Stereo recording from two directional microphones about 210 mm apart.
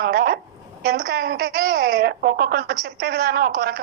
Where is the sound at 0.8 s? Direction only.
45° right (ahead or behind).